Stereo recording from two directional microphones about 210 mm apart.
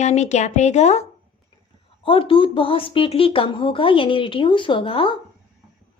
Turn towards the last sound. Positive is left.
turn(degrees=25)  # may be behind; listen again after turning